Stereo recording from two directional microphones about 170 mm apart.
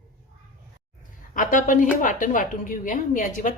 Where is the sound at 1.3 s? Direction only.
50° left (ahead or behind).